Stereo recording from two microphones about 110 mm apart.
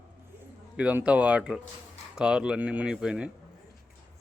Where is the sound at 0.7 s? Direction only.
10° right (ahead or behind).